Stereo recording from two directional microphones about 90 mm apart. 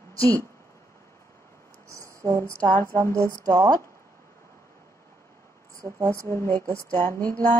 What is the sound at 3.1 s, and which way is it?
Speech, 35° right (ahead or behind).